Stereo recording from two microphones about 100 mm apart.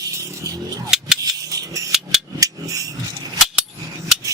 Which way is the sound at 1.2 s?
35° right (ahead or behind).